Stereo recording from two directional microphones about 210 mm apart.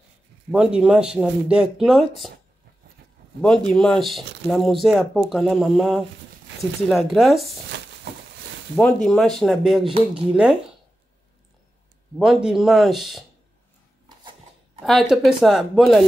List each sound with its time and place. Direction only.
0.5 s speech: 5° right (ahead or behind)
3.3 s speech: 5° left (ahead or behind)
7.7 s a sound: 60° right (ahead or behind)
8.7 s speech: 5° left (ahead or behind)
12.2 s speech: 5° right (ahead or behind)
14.8 s speech: centre (ahead or behind)